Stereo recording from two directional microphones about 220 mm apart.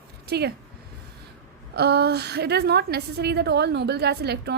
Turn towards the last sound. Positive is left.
turn(degrees=-50)  # may be behind; listen again after turning